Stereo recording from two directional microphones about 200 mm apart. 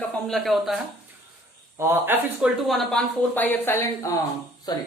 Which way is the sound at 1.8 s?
10° right (ahead or behind).